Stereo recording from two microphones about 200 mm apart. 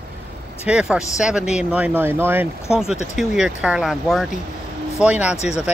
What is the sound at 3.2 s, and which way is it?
Speech, 5° right (ahead or behind).